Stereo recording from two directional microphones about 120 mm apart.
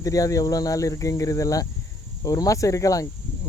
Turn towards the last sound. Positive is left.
turn(degrees=30)  # may be behind; listen again after turning